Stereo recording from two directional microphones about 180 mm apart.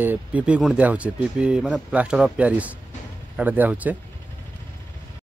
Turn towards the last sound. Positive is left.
turn(degrees=-10)  # may be behind; listen again after turning